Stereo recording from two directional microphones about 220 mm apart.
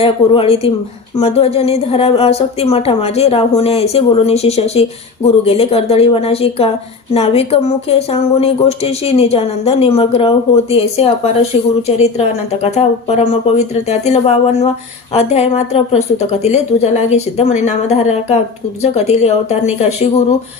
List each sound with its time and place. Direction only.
0.0 s a woman's voice: 25° left (ahead or behind)